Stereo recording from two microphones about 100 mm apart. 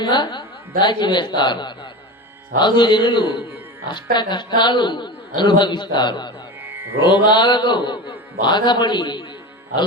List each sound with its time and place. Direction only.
0.0 s a man's voice: 50° left (ahead or behind)